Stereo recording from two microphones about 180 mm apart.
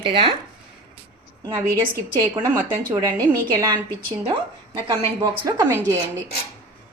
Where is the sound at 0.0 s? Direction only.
30° right (ahead or behind).